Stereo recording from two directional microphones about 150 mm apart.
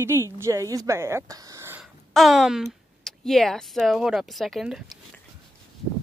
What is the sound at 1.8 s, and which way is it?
Speech, centre (ahead or behind).